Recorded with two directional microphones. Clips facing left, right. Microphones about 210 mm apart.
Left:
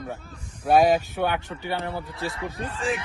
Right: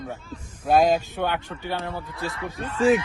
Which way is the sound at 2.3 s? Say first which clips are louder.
Even; 30° left (ahead or behind).